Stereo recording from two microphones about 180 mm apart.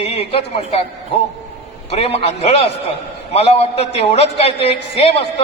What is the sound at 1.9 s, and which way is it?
A man's voice, 35° left (ahead or behind).